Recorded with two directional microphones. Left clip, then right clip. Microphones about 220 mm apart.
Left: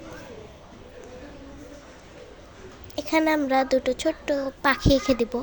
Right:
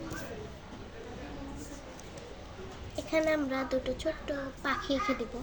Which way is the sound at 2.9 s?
50° left (ahead or behind).